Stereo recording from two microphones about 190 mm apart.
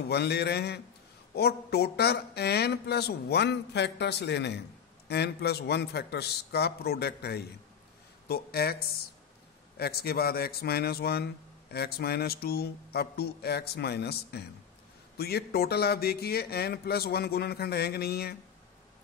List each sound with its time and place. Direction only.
0.1 s speech: 60° left (ahead or behind)